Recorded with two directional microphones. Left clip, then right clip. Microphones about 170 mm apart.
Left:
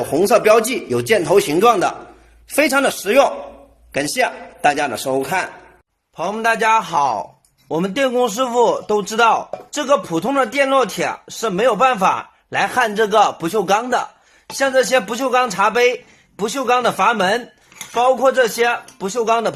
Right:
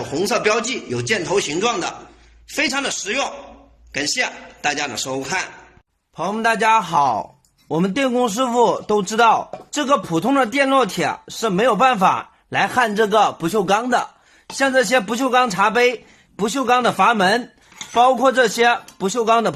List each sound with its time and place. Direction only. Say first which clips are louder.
0.1 s a man's voice: left 6 dB; 55° left (ahead or behind)
6.1 s a man's voice: left 1 dB; 15° right (ahead or behind)